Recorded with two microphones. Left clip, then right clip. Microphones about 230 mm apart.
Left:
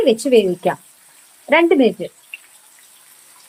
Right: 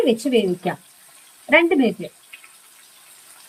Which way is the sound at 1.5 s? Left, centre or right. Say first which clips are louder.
Left 3 dB; left.